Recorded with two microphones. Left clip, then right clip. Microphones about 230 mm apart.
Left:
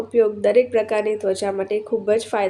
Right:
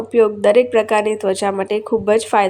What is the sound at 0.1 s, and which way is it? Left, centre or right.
A woman's voice, centre.